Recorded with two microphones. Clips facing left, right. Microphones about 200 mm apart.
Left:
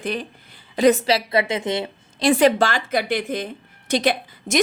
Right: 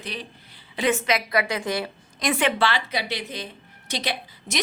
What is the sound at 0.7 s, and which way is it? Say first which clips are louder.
A woman's voice: left 7 dB; 40° left (ahead or behind).